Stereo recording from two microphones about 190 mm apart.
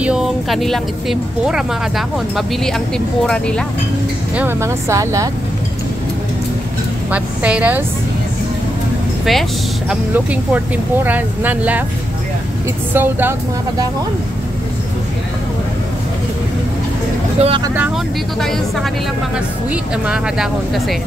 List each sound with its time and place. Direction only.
0.0 s speech: 5° right (ahead or behind)
4.4 s speech: 15° right (ahead or behind)
7.1 s a woman's voice: 5° right (ahead or behind)
9.2 s speech: centre (ahead or behind)
12.9 s speech: 10° right (ahead or behind)
17.4 s speech: 30° right (ahead or behind)
17.7 s speech: 5° right (ahead or behind)
19.7 s speech: 5° right (ahead or behind)